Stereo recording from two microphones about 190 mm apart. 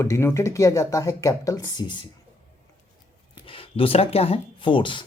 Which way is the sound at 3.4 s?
30° left (ahead or behind).